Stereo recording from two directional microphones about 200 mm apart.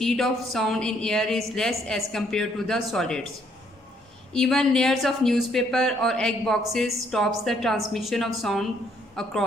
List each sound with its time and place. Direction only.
0.0 s speech: centre (ahead or behind)
4.3 s speech: 5° left (ahead or behind)